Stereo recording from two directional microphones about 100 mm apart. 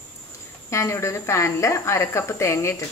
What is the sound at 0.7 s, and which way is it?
Speech, 30° left (ahead or behind).